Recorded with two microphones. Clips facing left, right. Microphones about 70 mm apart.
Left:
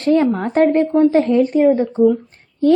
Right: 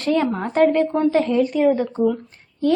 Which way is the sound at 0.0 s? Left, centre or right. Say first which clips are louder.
Left 5 dB; left.